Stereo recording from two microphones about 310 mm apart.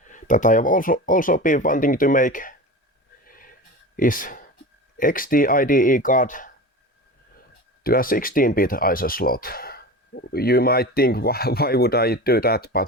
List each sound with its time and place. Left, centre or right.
0.1 s speech: left
3.2 s a sound: left
3.9 s speech: left
7.9 s speech: left